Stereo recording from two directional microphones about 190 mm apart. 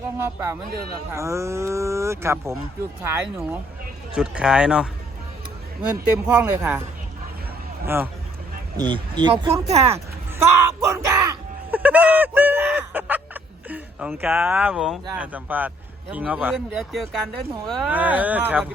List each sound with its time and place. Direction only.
1.1 s a man's voice: 15° right (ahead or behind)
6.2 s speech: 10° right (ahead or behind)
7.9 s speech: 10° right (ahead or behind)
8.8 s speech: 25° right (ahead or behind)
10.3 s a sound: 15° right (ahead or behind)
16.1 s speech: 10° right (ahead or behind)